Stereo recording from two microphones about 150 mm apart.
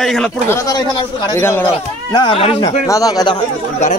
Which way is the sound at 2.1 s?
35° left (ahead or behind).